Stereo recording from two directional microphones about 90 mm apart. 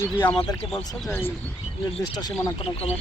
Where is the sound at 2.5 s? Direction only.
90° left.